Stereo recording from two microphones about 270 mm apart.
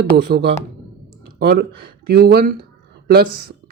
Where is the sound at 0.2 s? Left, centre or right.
Right.